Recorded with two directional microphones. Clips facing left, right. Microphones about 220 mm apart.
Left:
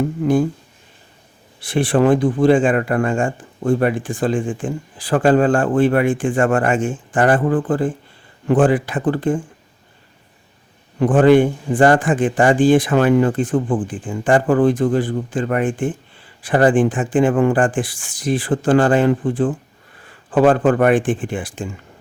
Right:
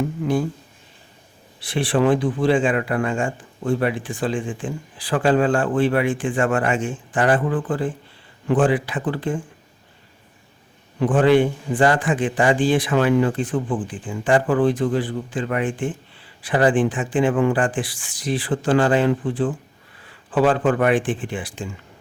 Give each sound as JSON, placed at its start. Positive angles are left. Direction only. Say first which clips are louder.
{"t": 1.6, "sound": "speech", "louder": "left 4 dB", "side_deg": 50}
{"t": 11.0, "sound": "speech", "louder": "left 4 dB", "side_deg": 45}